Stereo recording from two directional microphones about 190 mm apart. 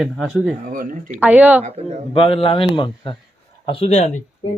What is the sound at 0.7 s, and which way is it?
Speech, 45° right (ahead or behind).